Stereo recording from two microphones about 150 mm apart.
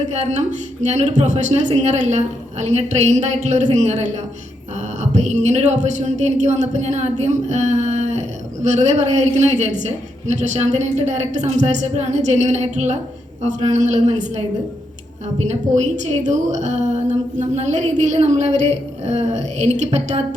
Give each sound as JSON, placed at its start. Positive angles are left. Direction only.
{"t": 0.1, "sound": "a woman's voice", "side_deg": -50}
{"t": 15.4, "sound": "a woman's voice", "side_deg": -50}